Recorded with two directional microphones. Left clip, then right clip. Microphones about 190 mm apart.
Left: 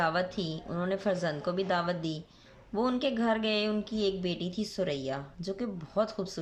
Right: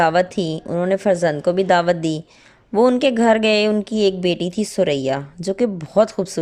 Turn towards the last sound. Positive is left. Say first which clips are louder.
# right 14 dB
turn(degrees=-40)  # may be behind; listen again after turning